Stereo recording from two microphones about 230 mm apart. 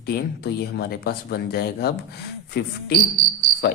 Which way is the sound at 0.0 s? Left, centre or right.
Left.